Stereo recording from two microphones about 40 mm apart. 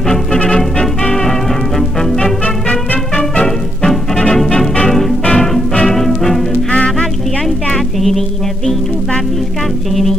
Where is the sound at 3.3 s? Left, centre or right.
Centre.